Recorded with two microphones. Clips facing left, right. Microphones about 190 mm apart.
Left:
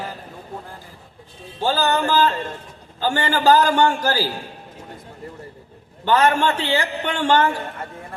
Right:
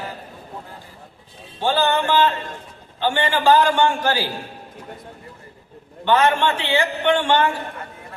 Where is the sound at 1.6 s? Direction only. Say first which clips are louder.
Even; 40° left (ahead or behind).